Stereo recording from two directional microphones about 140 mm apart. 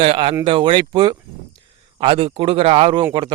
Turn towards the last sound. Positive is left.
turn(degrees=-40)  # may be behind; listen again after turning